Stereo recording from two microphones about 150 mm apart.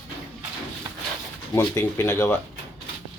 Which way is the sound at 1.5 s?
20° left (ahead or behind).